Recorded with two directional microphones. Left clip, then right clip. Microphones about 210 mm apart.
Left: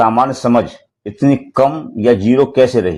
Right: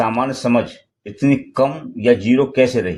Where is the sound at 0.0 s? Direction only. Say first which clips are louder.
Left 6 dB; 25° left (ahead or behind).